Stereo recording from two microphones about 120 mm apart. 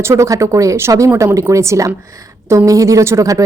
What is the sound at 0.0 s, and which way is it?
Speech, 25° right (ahead or behind).